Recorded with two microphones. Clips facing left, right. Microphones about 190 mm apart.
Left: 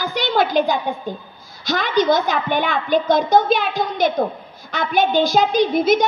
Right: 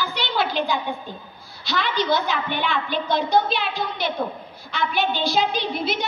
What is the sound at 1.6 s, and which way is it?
A child's voice, 45° left (ahead or behind).